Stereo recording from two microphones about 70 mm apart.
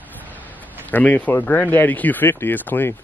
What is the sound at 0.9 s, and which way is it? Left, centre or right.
Speech, left.